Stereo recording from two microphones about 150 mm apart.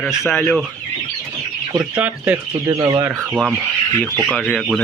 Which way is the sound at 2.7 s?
25° right (ahead or behind).